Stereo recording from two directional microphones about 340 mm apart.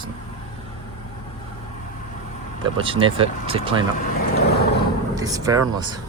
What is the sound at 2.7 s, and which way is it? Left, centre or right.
Speech, centre.